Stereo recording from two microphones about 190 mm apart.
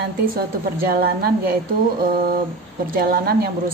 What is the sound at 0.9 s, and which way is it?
Speech, 50° right (ahead or behind).